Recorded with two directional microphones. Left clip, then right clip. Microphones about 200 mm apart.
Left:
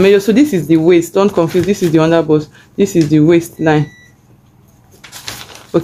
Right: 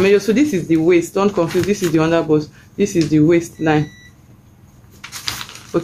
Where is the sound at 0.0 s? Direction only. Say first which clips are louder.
Left 4 dB; 40° left (ahead or behind).